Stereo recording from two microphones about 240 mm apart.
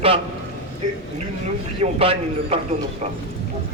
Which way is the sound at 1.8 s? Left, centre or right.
Right.